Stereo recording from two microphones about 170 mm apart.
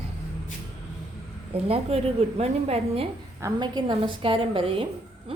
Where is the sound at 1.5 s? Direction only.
35° right (ahead or behind).